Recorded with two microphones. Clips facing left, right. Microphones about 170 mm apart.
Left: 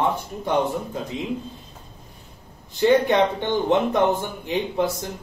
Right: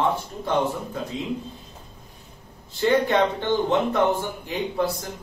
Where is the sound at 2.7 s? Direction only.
20° left (ahead or behind).